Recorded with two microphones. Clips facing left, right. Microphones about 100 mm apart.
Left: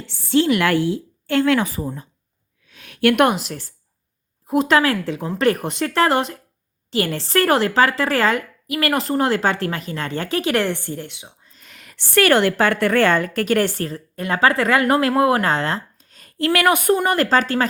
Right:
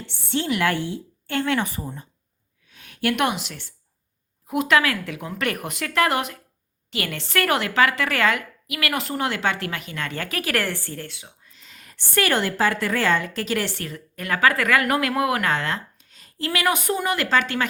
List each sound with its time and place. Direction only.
0.3 s speech: 90° left
2.6 s a woman's voice: 90° left; by 11.3 s 20° left (ahead or behind)
11.6 s a woman's voice: 70° left (ahead or behind); by 17.7 s 35° left (ahead or behind)